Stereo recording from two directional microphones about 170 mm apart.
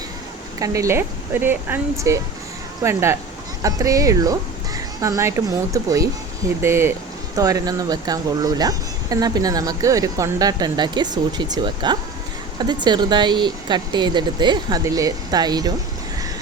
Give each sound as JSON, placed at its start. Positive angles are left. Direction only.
{"t": 0.6, "sound": "speech", "side_deg": -20}